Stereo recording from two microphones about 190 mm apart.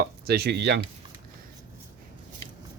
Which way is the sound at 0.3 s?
60° right (ahead or behind).